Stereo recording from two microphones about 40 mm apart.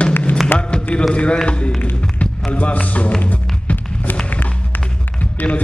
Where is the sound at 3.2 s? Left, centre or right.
Left.